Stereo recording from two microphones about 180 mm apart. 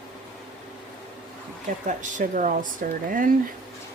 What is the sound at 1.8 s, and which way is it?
Speech, 45° right (ahead or behind).